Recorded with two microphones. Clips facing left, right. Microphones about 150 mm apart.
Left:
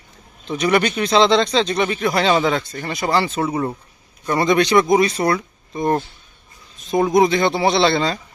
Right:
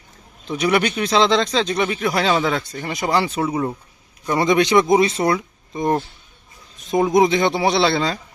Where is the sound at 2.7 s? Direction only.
10° right (ahead or behind).